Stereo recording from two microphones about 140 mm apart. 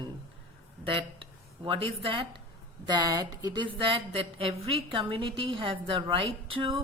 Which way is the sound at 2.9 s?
30° right (ahead or behind).